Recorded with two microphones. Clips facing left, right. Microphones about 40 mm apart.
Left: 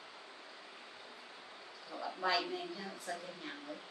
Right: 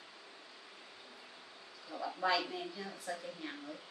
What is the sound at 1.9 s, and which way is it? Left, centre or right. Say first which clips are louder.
A woman's voice: right 2 dB; centre.